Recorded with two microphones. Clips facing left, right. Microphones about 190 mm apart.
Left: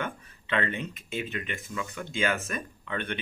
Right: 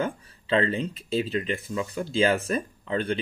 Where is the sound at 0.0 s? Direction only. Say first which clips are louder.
Right 6 dB; 30° right (ahead or behind).